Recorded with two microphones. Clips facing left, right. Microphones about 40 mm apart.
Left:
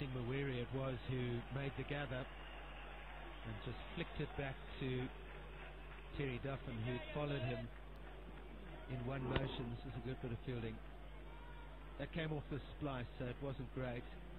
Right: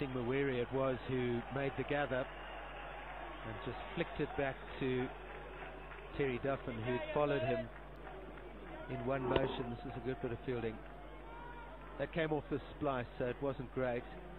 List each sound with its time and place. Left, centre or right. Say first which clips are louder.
0.0 s a sound: right 8 dB; centre
0.8 s a man's voice: right 8 dB; centre
3.4 s a man's voice: right 6 dB; centre
6.2 s a man's voice: right 8 dB; centre
8.8 s a man's voice: right 8 dB; centre
12.0 s a man's voice: right 8 dB; centre